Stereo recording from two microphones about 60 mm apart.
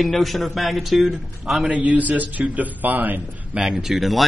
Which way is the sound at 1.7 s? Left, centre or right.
Right.